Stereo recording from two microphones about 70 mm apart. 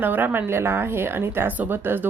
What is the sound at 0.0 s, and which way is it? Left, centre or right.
Speech, right.